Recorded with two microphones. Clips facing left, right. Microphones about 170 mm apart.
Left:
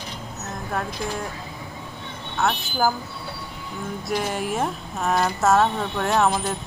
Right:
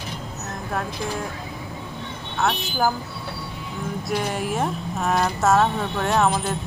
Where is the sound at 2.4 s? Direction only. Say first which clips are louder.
Even; centre (ahead or behind).